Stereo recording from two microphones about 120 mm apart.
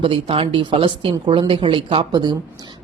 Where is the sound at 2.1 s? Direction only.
35° right (ahead or behind).